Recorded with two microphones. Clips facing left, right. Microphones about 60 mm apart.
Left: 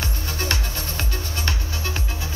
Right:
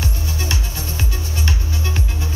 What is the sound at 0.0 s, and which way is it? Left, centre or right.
Music, left.